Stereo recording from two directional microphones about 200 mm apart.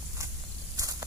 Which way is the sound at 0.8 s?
15° right (ahead or behind).